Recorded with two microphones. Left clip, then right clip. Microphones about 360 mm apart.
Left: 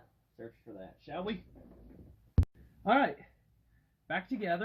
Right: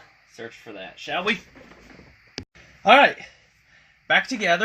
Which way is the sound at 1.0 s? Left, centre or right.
Right.